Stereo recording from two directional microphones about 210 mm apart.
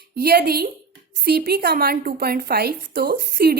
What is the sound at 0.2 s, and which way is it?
A woman's voice, 45° right (ahead or behind).